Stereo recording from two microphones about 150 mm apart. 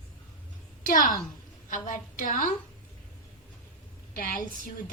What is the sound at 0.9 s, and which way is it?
A woman's voice, 60° left (ahead or behind).